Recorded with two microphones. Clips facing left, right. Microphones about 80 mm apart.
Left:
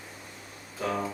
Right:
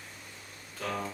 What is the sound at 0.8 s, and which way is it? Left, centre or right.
Speech, centre.